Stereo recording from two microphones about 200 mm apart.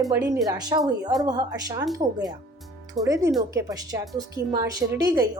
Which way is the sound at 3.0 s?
15° right (ahead or behind).